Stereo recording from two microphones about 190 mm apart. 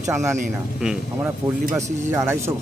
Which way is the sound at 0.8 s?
5° right (ahead or behind).